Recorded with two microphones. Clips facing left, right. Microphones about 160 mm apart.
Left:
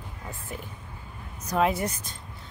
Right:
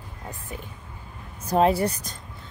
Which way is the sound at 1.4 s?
30° right (ahead or behind).